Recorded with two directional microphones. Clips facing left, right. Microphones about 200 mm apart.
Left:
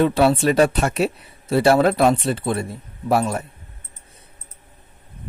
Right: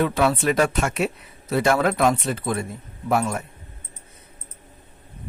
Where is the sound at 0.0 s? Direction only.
30° left (ahead or behind).